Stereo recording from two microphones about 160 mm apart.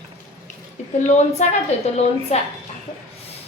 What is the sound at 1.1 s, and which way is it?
Speech, 45° left (ahead or behind).